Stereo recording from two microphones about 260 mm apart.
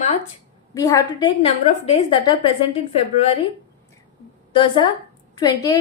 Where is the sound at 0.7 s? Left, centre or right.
Centre.